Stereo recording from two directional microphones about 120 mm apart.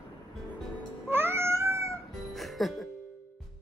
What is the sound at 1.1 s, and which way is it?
Cat, 20° right (ahead or behind).